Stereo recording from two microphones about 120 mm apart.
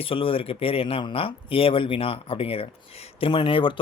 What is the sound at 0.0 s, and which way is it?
Speech, 50° left (ahead or behind).